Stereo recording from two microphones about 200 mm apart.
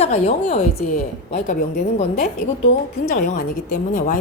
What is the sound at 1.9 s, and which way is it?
Speech, 30° left (ahead or behind).